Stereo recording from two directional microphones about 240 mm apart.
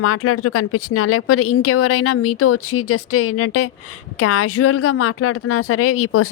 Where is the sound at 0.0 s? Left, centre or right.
Left.